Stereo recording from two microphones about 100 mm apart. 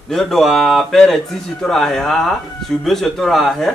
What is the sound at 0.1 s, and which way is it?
Speech, centre (ahead or behind).